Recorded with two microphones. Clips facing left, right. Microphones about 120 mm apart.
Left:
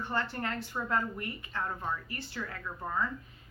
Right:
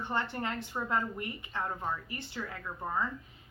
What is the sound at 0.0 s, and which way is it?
A woman's voice, 20° right (ahead or behind).